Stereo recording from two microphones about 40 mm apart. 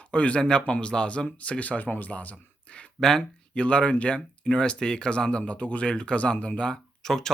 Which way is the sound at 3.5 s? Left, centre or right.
Left.